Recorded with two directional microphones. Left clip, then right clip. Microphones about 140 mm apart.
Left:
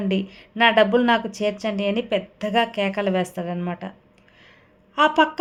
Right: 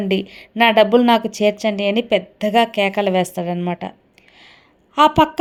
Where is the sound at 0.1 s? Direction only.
30° right (ahead or behind).